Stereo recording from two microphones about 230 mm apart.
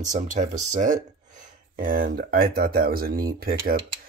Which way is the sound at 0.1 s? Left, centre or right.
Right.